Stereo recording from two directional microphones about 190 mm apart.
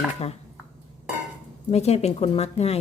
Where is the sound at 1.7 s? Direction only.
35° left (ahead or behind).